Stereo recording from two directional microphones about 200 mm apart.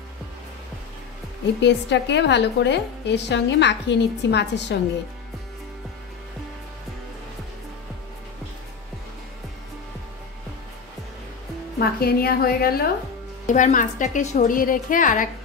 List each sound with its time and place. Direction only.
1.6 s a woman's voice: 60° left (ahead or behind)
11.8 s a woman's voice: 50° left (ahead or behind)